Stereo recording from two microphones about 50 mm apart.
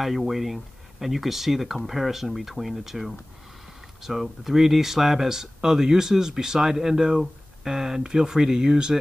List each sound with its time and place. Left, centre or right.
0.0 s speech: centre